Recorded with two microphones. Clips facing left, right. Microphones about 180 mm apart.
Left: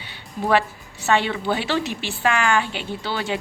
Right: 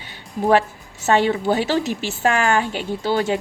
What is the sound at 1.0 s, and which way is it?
A woman's voice, 40° right (ahead or behind).